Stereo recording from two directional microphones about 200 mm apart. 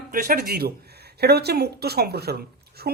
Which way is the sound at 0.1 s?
50° right (ahead or behind).